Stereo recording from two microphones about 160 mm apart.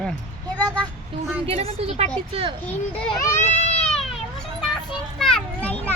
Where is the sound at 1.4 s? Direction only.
40° right (ahead or behind).